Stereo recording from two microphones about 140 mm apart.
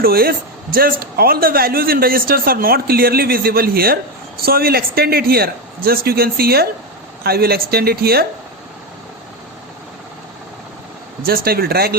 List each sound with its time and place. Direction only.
0.0 s a man's voice: 90° right
11.2 s a man's voice: 90° right